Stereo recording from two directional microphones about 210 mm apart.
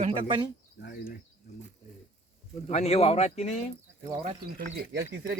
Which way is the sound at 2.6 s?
30° left (ahead or behind).